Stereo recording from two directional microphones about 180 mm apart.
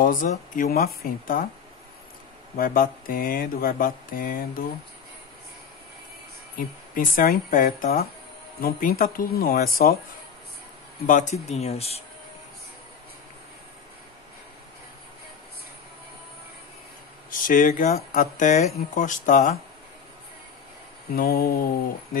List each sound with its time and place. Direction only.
0.0 s speech: 50° left (ahead or behind)
2.5 s speech: 50° left (ahead or behind)
7.0 s speech: 50° left (ahead or behind)
11.1 s speech: 45° left (ahead or behind)
17.3 s speech: 50° left (ahead or behind)
21.1 s speech: 55° left (ahead or behind)